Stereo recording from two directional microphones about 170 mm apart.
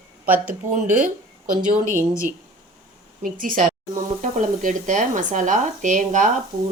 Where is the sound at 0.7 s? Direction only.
50° right (ahead or behind).